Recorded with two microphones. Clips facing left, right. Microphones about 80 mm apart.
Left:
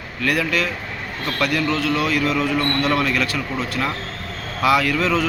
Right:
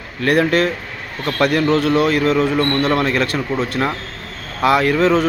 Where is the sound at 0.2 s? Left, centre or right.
Right.